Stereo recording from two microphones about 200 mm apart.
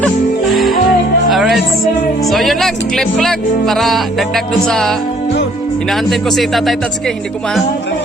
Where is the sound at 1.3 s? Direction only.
Centre (ahead or behind).